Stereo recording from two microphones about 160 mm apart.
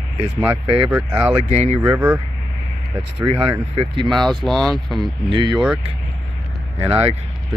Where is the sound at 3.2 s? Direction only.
35° right (ahead or behind).